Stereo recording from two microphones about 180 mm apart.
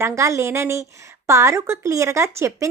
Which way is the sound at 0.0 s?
15° right (ahead or behind).